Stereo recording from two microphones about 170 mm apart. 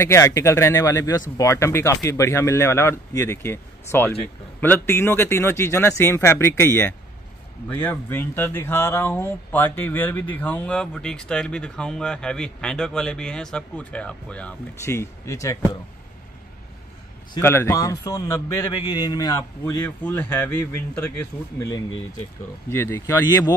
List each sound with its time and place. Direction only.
0.0 s speech: 15° left (ahead or behind)
17.3 s a man's voice: 15° left (ahead or behind)
19.6 s speech: 10° left (ahead or behind)
21.5 s a man's voice: 20° left (ahead or behind)